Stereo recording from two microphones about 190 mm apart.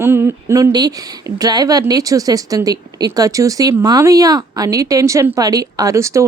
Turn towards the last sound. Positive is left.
turn(degrees=-15)  # may be behind; listen again after turning